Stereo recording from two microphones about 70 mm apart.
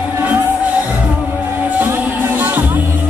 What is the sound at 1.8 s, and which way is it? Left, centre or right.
Music, right.